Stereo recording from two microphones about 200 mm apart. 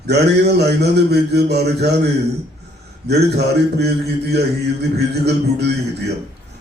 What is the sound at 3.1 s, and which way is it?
Speech, 55° right (ahead or behind).